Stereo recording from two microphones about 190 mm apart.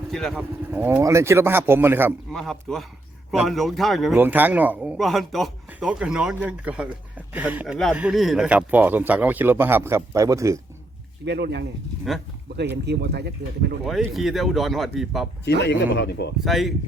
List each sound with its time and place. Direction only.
0.1 s speech: centre (ahead or behind)
0.3 s speech: 10° right (ahead or behind)
2.3 s speech: centre (ahead or behind); by 10.6 s 15° right (ahead or behind)
11.3 s speech: 65° right (ahead or behind)
12.1 s speech: centre (ahead or behind)
12.7 s speech: 60° right (ahead or behind)
13.8 s speech: centre (ahead or behind)
15.4 s speech: 65° left (ahead or behind)
16.4 s speech: centre (ahead or behind)